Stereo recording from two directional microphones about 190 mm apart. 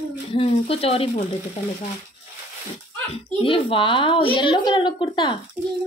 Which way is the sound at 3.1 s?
30° left (ahead or behind).